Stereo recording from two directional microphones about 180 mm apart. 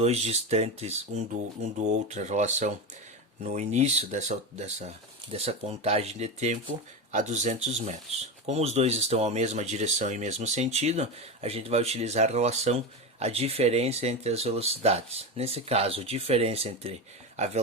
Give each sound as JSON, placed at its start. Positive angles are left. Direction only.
{"t": 0.0, "sound": "speech", "side_deg": -35}